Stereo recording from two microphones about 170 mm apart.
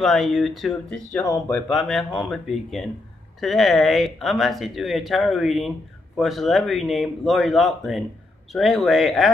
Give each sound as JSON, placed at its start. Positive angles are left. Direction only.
{"t": 0.0, "sound": "speech", "side_deg": 0}
{"t": 1.2, "sound": "speech", "side_deg": 20}
{"t": 1.7, "sound": "speech", "side_deg": 0}